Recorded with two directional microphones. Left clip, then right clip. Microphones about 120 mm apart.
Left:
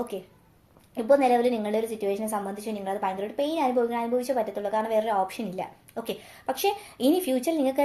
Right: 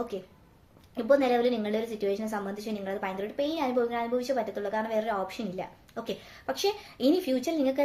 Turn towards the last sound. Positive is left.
turn(degrees=20)  # may be behind; listen again after turning